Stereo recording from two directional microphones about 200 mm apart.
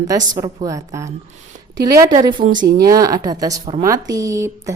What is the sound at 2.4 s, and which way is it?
Speech, 45° right (ahead or behind).